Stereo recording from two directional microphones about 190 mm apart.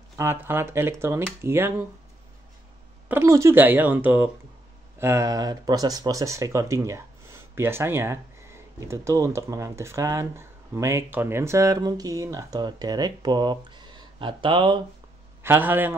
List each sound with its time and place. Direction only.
0.2 s speech: 10° right (ahead or behind)
3.1 s speech: 15° right (ahead or behind)
15.4 s speech: 10° right (ahead or behind)